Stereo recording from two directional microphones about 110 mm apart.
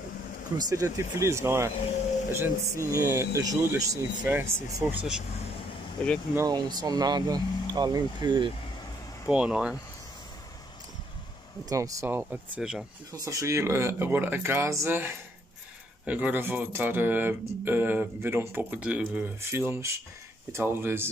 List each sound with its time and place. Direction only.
0.6 s speech: 35° right (ahead or behind)
4.2 s speech: 15° right (ahead or behind)
4.9 s speech: 5° right (ahead or behind)
6.0 s speech: 10° left (ahead or behind)
6.5 s speech: 40° right (ahead or behind)
9.3 s speech: 10° right (ahead or behind)
11.7 s speech: 30° right (ahead or behind)
12.1 s speech: 15° right (ahead or behind)
13.1 s speech: 30° right (ahead or behind); by 19.2 s 10° right (ahead or behind)
19.5 s speech: 25° right (ahead or behind)